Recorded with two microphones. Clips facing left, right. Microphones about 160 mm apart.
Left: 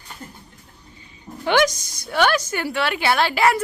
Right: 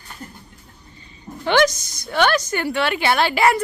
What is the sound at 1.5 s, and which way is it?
A woman's voice, 10° left (ahead or behind).